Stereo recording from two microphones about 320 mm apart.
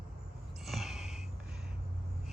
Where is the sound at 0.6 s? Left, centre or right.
Centre.